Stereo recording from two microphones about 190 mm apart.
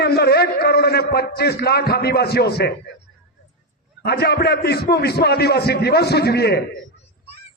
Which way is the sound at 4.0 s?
55° left (ahead or behind).